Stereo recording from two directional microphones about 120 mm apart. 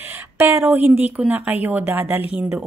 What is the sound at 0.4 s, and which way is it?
A woman's voice, 20° right (ahead or behind).